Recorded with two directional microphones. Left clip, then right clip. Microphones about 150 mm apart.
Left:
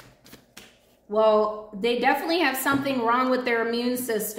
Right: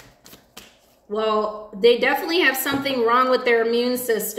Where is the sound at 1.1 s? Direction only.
10° left (ahead or behind).